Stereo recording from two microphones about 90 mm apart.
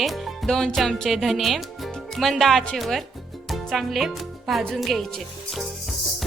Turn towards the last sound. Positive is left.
turn(degrees=0)  # may be behind; listen again after turning